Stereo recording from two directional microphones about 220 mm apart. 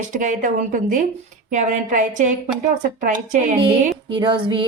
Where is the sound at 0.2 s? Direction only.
35° right (ahead or behind).